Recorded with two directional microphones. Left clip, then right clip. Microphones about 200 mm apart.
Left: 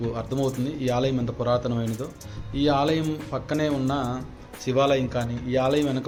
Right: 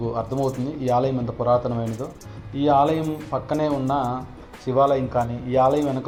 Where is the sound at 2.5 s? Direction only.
25° left (ahead or behind).